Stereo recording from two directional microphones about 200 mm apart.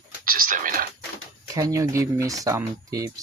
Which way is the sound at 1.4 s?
15° right (ahead or behind).